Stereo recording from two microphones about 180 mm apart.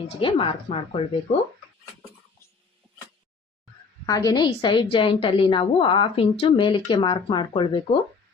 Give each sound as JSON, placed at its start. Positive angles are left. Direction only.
{"t": 0.2, "sound": "speech", "side_deg": 30}
{"t": 4.0, "sound": "a woman's voice", "side_deg": 20}